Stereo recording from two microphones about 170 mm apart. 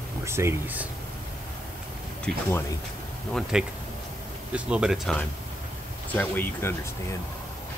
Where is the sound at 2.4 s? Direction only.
15° left (ahead or behind).